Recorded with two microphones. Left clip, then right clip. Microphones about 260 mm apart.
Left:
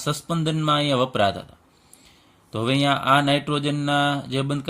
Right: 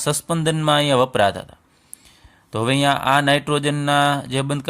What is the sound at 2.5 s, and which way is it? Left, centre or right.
Speech, right.